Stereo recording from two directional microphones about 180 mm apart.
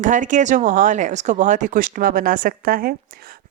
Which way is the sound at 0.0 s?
45° right (ahead or behind).